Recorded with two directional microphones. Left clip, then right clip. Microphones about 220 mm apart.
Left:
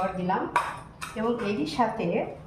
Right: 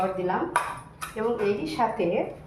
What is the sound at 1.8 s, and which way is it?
Speech, 25° right (ahead or behind).